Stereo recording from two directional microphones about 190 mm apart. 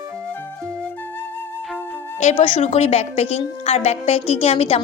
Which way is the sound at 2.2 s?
35° left (ahead or behind).